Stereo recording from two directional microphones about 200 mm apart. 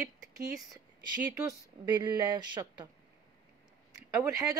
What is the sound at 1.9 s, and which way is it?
Speech, 20° right (ahead or behind).